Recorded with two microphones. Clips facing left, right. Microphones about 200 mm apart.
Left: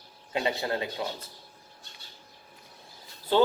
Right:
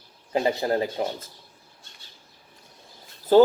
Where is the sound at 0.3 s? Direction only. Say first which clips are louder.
Right 6 dB; 35° right (ahead or behind).